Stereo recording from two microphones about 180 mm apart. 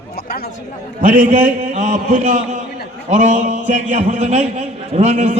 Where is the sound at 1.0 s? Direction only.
50° right (ahead or behind).